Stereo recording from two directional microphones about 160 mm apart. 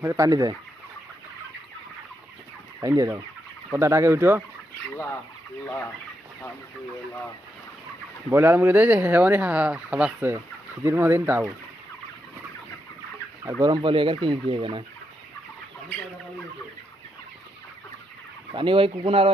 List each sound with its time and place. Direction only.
0.0 s speech: 20° right (ahead or behind)
2.8 s speech: 20° right (ahead or behind)
8.3 s speech: 15° right (ahead or behind)
13.6 s speech: 30° right (ahead or behind)
18.5 s speech: 35° right (ahead or behind)